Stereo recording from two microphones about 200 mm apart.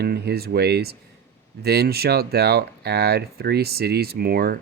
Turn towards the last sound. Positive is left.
turn(degrees=-50)  # may be behind; listen again after turning